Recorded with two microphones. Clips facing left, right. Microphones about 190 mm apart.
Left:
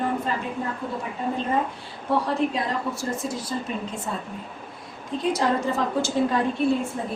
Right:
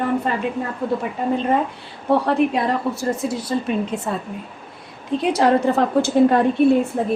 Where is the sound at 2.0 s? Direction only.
60° right (ahead or behind).